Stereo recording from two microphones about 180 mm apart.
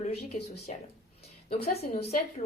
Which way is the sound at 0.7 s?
45° left (ahead or behind).